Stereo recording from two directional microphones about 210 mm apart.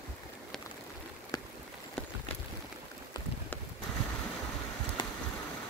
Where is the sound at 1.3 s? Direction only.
15° left (ahead or behind).